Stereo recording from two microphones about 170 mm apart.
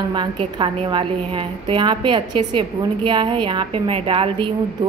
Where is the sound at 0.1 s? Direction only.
30° right (ahead or behind).